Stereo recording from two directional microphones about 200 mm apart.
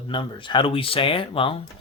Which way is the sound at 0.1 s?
25° left (ahead or behind).